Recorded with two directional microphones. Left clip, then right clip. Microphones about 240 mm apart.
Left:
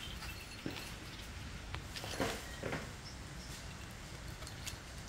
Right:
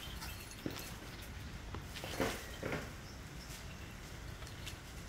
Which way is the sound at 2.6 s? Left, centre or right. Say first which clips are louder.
Right 1 dB; right.